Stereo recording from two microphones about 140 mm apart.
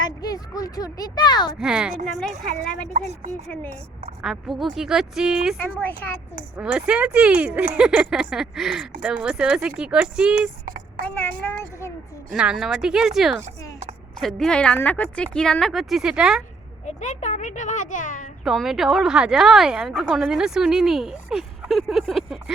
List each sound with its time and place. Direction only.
0.0 s speech: 25° left (ahead or behind)
1.5 s speech: 5° right (ahead or behind)
2.9 s speech: 55° right (ahead or behind)
3.4 s speech: 10° left (ahead or behind)
4.2 s speech: centre (ahead or behind)
5.5 s speech: 15° left (ahead or behind)
6.6 s speech: 5° right (ahead or behind)
11.0 s speech: 15° left (ahead or behind)
12.3 s speech: 5° right (ahead or behind)
16.8 s a child's voice: 55° left (ahead or behind)
18.4 s speech: centre (ahead or behind)